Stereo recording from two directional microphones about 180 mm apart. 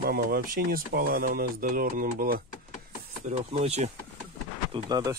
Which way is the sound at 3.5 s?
35° right (ahead or behind).